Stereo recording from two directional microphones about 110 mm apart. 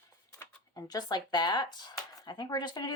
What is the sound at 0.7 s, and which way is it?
Speech, 35° left (ahead or behind).